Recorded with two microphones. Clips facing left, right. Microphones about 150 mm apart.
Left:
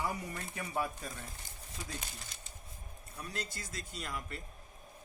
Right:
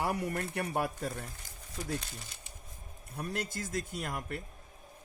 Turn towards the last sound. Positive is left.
turn(degrees=-55)  # may be behind; listen again after turning